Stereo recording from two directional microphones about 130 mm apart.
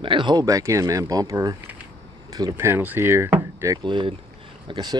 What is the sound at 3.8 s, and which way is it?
Speech, 40° right (ahead or behind).